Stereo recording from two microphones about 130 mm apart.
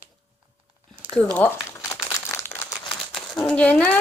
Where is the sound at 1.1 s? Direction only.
10° left (ahead or behind).